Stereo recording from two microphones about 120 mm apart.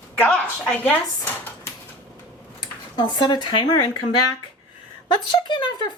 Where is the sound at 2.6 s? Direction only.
35° left (ahead or behind).